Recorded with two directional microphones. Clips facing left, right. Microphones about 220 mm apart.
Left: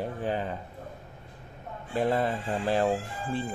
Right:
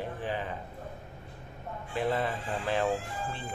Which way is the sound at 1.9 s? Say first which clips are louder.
Left 4 dB; 40° left (ahead or behind).